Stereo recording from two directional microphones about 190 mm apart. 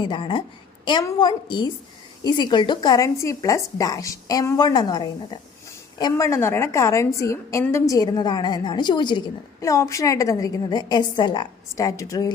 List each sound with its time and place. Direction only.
0.0 s a woman's voice: 25° left (ahead or behind)